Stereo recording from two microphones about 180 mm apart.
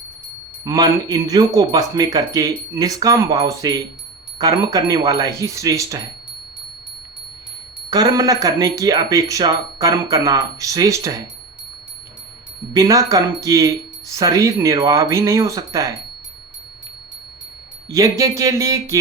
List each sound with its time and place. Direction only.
0.6 s speech: 20° right (ahead or behind)
7.9 s speech: 20° right (ahead or behind)
12.7 s speech: 20° right (ahead or behind)
17.8 s speech: 20° right (ahead or behind)